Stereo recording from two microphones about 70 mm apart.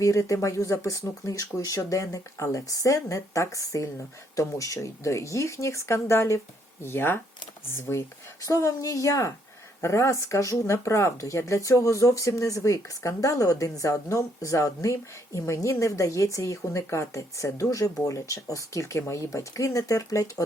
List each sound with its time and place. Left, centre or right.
0.0 s speech: left
8.4 s a woman's voice: left